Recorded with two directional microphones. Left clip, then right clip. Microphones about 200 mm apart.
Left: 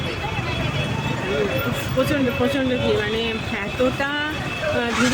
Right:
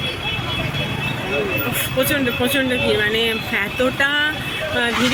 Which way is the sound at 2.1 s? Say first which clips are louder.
Right 2 dB; centre (ahead or behind).